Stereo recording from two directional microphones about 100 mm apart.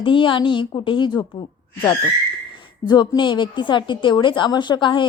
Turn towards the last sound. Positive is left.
turn(degrees=55)  # may be behind; listen again after turning